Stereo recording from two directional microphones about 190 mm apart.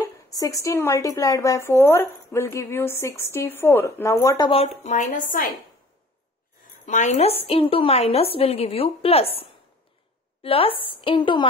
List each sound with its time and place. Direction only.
0.0 s speech: 20° left (ahead or behind)
4.5 s a woman's voice: 30° left (ahead or behind)
6.9 s a woman's voice: 40° left (ahead or behind)